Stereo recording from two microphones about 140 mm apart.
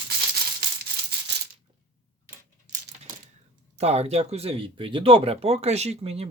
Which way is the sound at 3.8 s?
50° right (ahead or behind).